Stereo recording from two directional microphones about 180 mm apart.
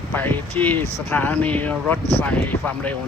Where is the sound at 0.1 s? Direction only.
10° left (ahead or behind).